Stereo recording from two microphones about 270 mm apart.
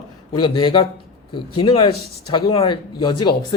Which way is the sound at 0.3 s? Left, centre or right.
Centre.